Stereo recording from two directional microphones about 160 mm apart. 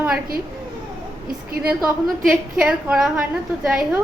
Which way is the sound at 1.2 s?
65° right (ahead or behind).